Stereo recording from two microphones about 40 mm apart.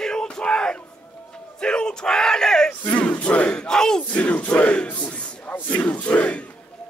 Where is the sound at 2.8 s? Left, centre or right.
Left.